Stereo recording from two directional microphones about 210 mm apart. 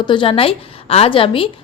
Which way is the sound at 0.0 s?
25° left (ahead or behind).